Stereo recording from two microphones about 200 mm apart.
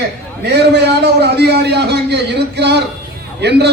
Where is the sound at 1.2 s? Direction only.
55° right (ahead or behind).